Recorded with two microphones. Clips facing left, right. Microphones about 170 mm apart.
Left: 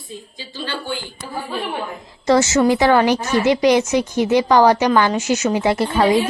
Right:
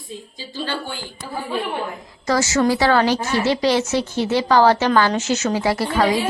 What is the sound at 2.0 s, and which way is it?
A woman's voice, 25° left (ahead or behind).